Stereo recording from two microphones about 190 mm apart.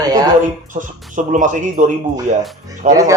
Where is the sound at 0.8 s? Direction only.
45° right (ahead or behind).